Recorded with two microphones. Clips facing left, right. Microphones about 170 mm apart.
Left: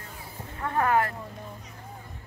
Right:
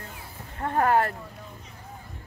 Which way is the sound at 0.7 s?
35° right (ahead or behind).